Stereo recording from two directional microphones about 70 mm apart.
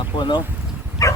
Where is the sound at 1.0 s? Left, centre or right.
Left.